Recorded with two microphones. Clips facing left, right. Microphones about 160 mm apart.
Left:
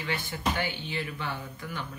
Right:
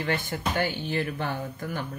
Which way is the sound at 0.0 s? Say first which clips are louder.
Right 3 dB; 50° right (ahead or behind).